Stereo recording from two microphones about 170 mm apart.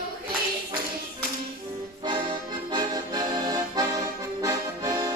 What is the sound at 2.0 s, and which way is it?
Accordion, 30° right (ahead or behind).